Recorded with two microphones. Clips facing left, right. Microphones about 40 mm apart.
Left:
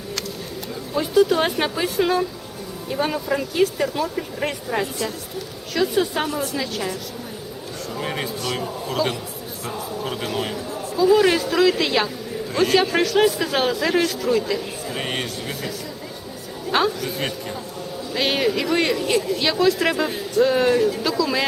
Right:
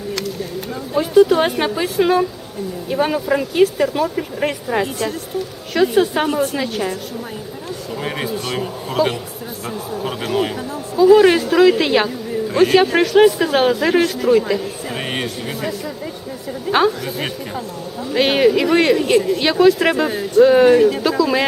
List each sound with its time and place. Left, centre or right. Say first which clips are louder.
0.9 s a man's voice: right 5 dB; centre
4.8 s a woman's voice: right 5 dB; right
8.0 s a man's voice: right 3 dB; centre
16.7 s a man's voice: right 4 dB; centre
20.7 s a woman's voice: right 7 dB; right
21.0 s a man's voice: right 5 dB; centre